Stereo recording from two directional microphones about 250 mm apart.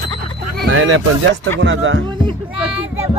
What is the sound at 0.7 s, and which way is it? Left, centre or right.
Speech, right.